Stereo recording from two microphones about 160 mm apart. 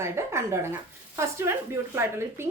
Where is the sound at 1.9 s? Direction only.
15° right (ahead or behind).